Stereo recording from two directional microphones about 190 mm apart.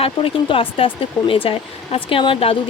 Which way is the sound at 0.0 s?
30° left (ahead or behind).